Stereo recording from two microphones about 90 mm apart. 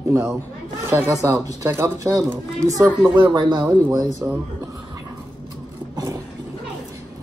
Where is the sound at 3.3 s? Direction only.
55° right (ahead or behind).